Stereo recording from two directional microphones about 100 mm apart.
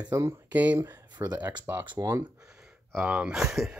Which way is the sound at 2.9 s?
10° right (ahead or behind).